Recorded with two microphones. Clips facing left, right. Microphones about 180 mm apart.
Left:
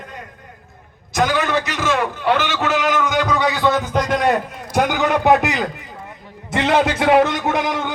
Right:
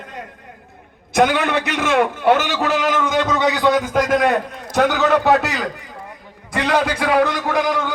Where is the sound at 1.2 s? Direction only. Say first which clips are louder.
Right 2 dB; 60° right (ahead or behind); by 4.3 s 5° right (ahead or behind).